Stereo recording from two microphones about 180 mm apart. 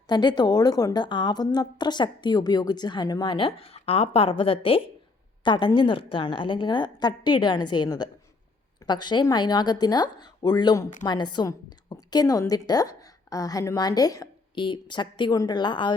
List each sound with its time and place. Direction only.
0.1 s a woman's voice: 25° left (ahead or behind)